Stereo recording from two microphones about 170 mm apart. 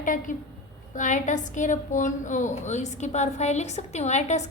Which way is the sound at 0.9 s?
45° left (ahead or behind).